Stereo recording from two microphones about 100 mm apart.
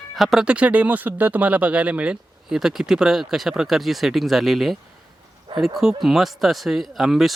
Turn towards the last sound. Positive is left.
turn(degrees=0)  # may be behind; listen again after turning